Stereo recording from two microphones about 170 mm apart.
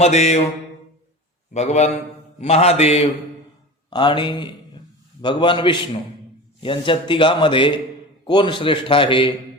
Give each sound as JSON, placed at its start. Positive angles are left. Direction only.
{"t": 0.0, "sound": "mantra", "side_deg": 40}
{"t": 1.5, "sound": "mantra", "side_deg": 40}
{"t": 3.8, "sound": "a man's voice", "side_deg": 25}